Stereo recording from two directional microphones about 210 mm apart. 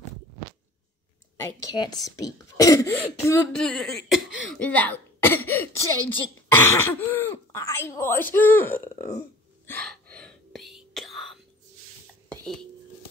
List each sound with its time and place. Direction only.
1.3 s speech: 15° left (ahead or behind)
3.6 s speech: centre (ahead or behind)
9.7 s whispering: 5° left (ahead or behind)
12.3 s a sound: centre (ahead or behind)